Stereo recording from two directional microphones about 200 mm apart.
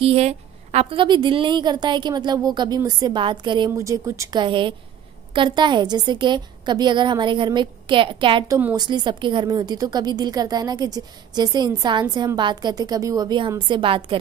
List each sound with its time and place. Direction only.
0.0 s a woman's voice: 30° right (ahead or behind)